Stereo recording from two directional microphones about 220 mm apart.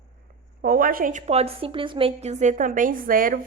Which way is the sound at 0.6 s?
40° right (ahead or behind).